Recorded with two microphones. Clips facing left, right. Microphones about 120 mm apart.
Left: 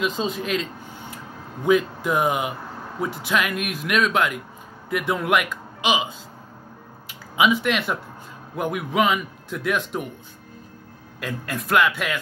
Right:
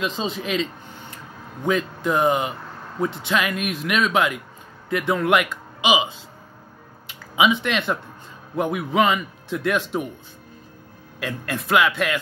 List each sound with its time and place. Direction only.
0.0 s a man's voice: centre (ahead or behind)
1.1 s a sound: 5° left (ahead or behind)
3.2 s a man's voice: centre (ahead or behind)
11.1 s a man's voice: centre (ahead or behind)